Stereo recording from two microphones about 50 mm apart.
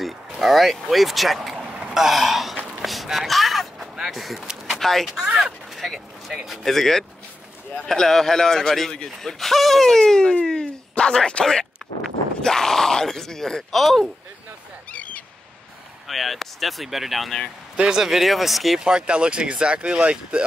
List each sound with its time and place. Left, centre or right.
0.0 s speech: centre
1.6 s a sound: centre
2.0 s speech: centre
2.8 s a sound: centre
4.0 s speech: centre
5.1 s speech: centre
5.4 s speech: centre
10.4 s a sound: centre
12.4 s speech: centre
14.9 s a sound: left
16.1 s speech: centre
17.7 s speech: centre
18.0 s speech: centre
18.8 s speech: centre